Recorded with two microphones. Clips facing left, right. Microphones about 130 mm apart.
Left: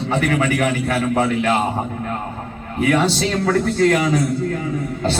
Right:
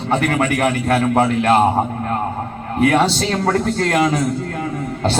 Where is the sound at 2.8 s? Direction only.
55° right (ahead or behind).